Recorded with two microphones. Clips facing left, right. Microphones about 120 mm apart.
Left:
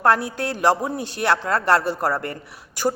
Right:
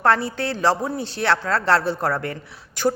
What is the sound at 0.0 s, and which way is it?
A woman's voice, 10° left (ahead or behind).